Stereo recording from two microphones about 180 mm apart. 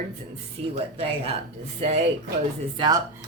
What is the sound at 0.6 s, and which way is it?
Speech, 30° right (ahead or behind).